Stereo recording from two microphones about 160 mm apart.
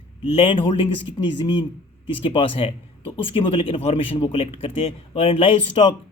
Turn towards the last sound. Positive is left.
turn(degrees=30)  # may be behind; listen again after turning